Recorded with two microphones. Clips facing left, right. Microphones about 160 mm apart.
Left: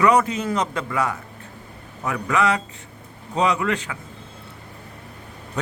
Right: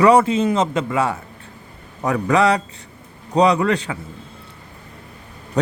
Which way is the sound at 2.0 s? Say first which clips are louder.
Right 5 dB; 35° right (ahead or behind).